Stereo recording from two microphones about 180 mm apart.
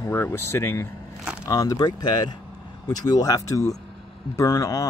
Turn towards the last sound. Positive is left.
turn(degrees=20)  # may be behind; listen again after turning